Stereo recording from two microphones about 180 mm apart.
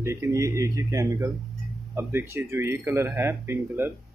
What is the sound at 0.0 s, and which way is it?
Speech, 15° right (ahead or behind).